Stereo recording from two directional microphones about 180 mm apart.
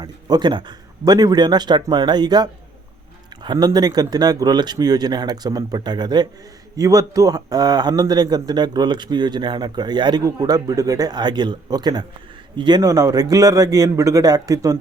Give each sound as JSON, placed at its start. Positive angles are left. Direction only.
{"t": 0.0, "sound": "speech", "side_deg": -25}